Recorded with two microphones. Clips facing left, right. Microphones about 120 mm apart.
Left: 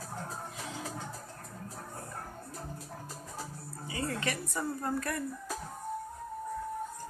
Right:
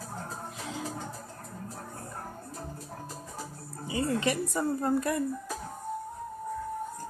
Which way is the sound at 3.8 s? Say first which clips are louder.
Right 6 dB; 20° right (ahead or behind).